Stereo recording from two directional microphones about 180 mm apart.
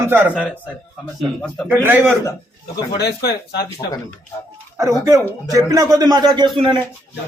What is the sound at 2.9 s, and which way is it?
Speech, 60° left (ahead or behind).